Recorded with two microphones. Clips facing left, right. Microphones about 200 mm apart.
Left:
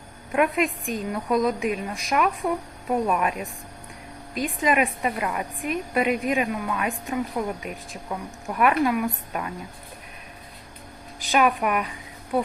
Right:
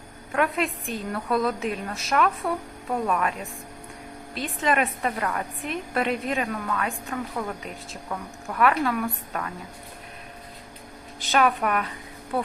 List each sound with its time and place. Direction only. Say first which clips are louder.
0.3 s a woman's voice: left 3 dB; 15° left (ahead or behind)
4.4 s a woman's voice: left 2 dB; 10° left (ahead or behind)
11.3 s a woman's voice: left 1 dB; 10° left (ahead or behind)